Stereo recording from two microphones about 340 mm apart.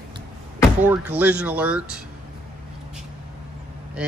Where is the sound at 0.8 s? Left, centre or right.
Centre.